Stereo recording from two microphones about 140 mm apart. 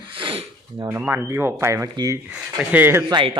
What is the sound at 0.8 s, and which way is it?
Speech, 15° right (ahead or behind).